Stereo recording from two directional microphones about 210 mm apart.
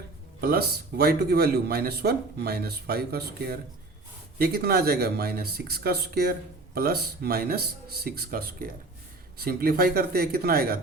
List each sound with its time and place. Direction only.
0.4 s speech: 50° right (ahead or behind)